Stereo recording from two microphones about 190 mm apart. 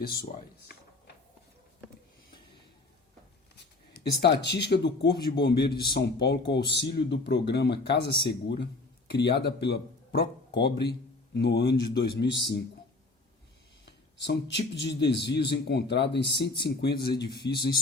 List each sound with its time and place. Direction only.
0.0 s speech: 55° left (ahead or behind)
3.9 s a man's voice: 60° left (ahead or behind)
14.3 s a man's voice: 65° left (ahead or behind)
17.3 s speech: 25° left (ahead or behind)